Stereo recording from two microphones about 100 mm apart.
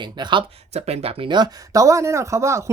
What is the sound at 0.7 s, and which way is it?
Speech, 90° right.